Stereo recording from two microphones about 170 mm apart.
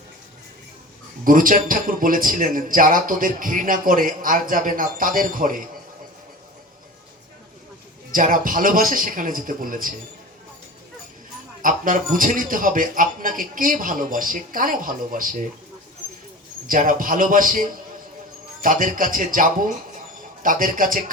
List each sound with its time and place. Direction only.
1.2 s a man's voice: 55° right (ahead or behind)
8.1 s a man's voice: 55° right (ahead or behind)
11.6 s a man's voice: 55° right (ahead or behind)
16.6 s a man's voice: 55° right (ahead or behind)